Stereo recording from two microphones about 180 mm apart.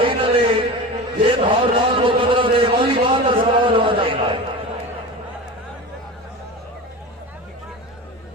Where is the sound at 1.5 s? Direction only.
30° right (ahead or behind).